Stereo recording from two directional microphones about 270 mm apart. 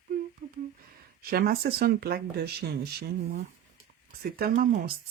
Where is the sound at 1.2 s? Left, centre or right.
Right.